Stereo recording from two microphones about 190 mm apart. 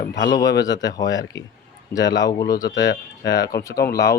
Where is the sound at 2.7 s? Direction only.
70° left (ahead or behind).